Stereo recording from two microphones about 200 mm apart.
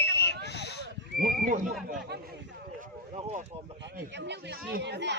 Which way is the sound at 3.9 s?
55° right (ahead or behind).